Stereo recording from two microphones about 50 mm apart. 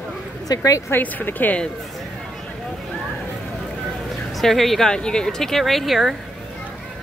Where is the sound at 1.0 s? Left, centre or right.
Left.